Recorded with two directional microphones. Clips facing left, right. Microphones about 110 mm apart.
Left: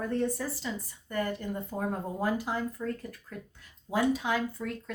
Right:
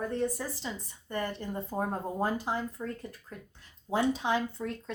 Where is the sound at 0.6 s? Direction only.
25° right (ahead or behind).